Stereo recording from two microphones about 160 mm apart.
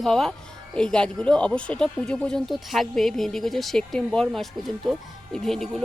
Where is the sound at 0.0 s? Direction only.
5° left (ahead or behind).